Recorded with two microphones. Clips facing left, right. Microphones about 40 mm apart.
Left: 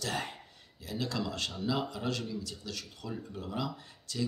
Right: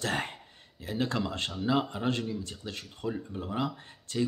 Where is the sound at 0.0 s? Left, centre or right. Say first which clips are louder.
Right 4 dB; right.